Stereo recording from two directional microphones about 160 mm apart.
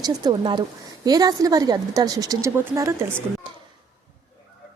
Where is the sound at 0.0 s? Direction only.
25° right (ahead or behind).